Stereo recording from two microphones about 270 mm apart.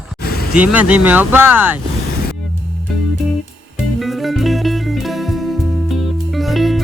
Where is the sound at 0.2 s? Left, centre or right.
Left.